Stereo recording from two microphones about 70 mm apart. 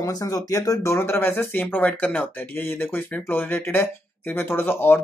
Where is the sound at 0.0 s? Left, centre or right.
Left.